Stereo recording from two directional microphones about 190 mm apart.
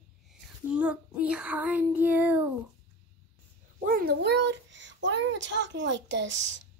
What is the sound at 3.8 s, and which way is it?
A child's voice, 50° right (ahead or behind).